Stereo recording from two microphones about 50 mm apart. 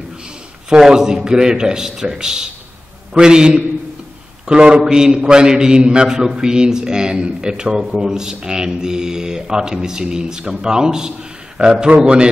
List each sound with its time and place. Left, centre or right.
0.7 s a man's voice: centre